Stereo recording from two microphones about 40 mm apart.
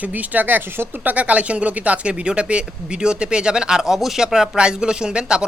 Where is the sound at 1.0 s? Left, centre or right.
Right.